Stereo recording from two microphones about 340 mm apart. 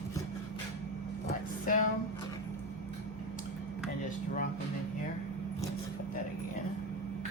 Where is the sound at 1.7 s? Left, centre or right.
Left.